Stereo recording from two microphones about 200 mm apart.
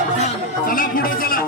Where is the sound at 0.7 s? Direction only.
45° left (ahead or behind).